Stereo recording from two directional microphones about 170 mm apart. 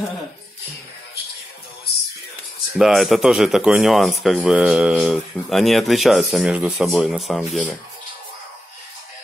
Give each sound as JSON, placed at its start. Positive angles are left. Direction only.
{"t": 2.8, "sound": "speech", "side_deg": 0}